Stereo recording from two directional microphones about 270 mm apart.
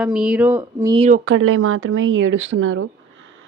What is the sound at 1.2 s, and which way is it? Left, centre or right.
A woman's voice, right.